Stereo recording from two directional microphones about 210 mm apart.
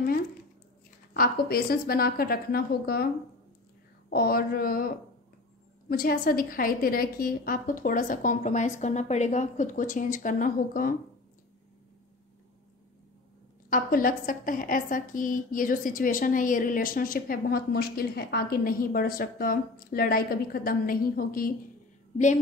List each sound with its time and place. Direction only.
1.1 s a woman's voice: 45° left (ahead or behind)
4.1 s a woman's voice: 45° left (ahead or behind)
13.7 s a woman's voice: 40° left (ahead or behind)